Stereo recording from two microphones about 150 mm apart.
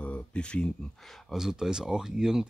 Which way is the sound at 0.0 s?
10° left (ahead or behind).